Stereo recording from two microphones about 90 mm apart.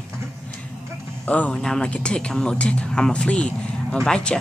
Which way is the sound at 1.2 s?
15° left (ahead or behind).